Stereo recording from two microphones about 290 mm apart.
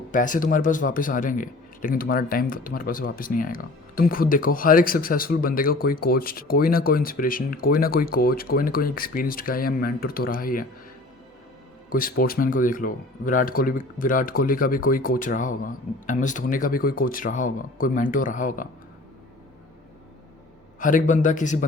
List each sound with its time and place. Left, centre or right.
0.1 s a man's voice: left
11.9 s a man's voice: left
20.7 s a man's voice: left